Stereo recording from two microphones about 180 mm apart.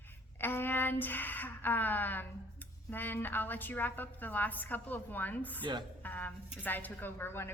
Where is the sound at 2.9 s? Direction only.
10° left (ahead or behind).